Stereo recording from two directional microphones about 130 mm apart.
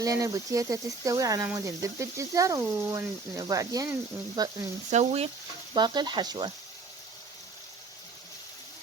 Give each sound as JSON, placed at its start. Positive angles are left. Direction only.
{"t": 0.0, "sound": "speech", "side_deg": -25}
{"t": 4.9, "sound": "speech", "side_deg": -60}
{"t": 5.7, "sound": "frying", "side_deg": -35}